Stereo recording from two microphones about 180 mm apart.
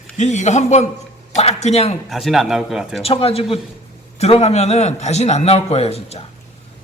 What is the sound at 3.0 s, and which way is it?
A man's voice, 35° left (ahead or behind).